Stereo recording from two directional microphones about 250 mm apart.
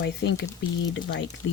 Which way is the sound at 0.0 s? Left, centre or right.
Left.